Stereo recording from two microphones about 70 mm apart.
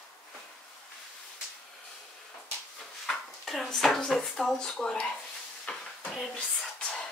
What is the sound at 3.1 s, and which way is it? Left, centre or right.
Speech, centre.